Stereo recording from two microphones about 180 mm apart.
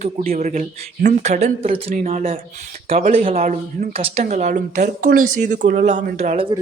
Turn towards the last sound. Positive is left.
turn(degrees=-45)  # may be behind; listen again after turning